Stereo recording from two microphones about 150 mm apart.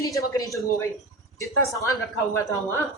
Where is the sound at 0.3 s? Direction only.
20° left (ahead or behind).